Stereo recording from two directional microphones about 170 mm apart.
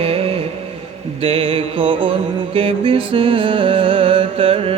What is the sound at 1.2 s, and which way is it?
Music, 35° right (ahead or behind).